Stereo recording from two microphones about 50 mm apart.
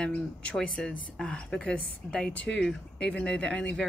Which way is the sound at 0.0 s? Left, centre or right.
Left.